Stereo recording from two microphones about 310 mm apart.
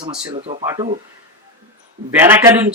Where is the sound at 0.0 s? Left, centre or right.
Centre.